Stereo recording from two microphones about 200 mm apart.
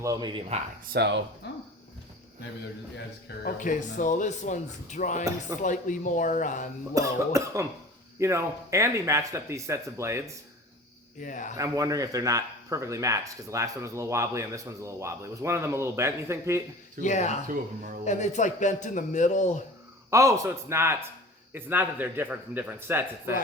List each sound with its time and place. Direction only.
0.0 s speech: 20° right (ahead or behind)
0.9 s speech: 60° right (ahead or behind)
1.4 s speech: 55° left (ahead or behind)
2.9 s speech: 50° left (ahead or behind)
6.9 s a man's voice: 15° right (ahead or behind)
11.2 s speech: 40° left (ahead or behind)
11.5 s a man's voice: 15° right (ahead or behind)
17.0 s speech: 35° left (ahead or behind)
17.5 s speech: 45° right (ahead or behind)
18.0 s speech: 35° left (ahead or behind)
20.1 s a man's voice: 15° right (ahead or behind)